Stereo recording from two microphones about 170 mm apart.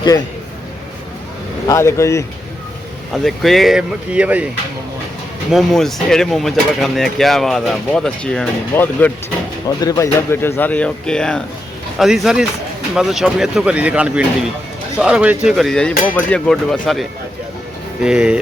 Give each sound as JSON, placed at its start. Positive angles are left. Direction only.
{"t": 1.6, "sound": "speech", "side_deg": 15}
{"t": 3.2, "sound": "speech", "side_deg": 0}
{"t": 5.5, "sound": "speech", "side_deg": 0}
{"t": 9.6, "sound": "speech", "side_deg": 20}